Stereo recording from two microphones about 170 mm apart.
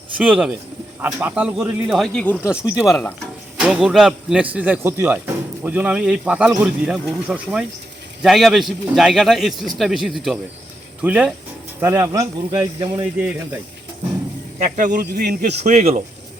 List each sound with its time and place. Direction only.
0.2 s speech: 5° right (ahead or behind)
3.6 s a man's voice: 5° right (ahead or behind); by 12.9 s 30° right (ahead or behind)
13.0 s a man's voice: 10° right (ahead or behind)
14.6 s speech: 50° right (ahead or behind)